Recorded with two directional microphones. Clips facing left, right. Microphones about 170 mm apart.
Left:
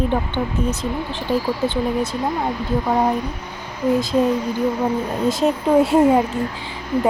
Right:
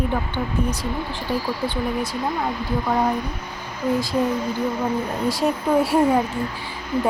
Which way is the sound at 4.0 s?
20° left (ahead or behind).